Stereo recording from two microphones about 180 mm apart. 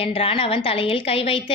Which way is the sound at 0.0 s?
35° left (ahead or behind).